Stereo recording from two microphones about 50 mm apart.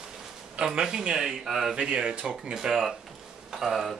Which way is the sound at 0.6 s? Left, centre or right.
Centre.